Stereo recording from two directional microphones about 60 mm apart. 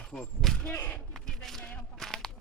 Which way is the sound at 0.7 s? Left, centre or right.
Left.